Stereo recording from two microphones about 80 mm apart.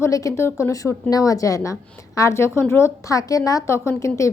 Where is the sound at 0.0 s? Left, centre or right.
Left.